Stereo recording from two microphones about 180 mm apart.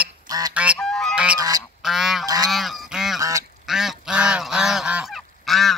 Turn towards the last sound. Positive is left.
turn(degrees=0)  # may be behind; listen again after turning